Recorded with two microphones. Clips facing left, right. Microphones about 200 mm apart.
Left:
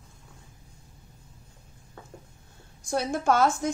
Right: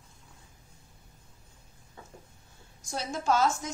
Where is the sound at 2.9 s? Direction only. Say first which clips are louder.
Left 4 dB; 55° left (ahead or behind).